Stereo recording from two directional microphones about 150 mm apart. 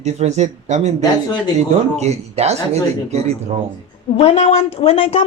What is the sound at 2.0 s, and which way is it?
Speech, 45° right (ahead or behind).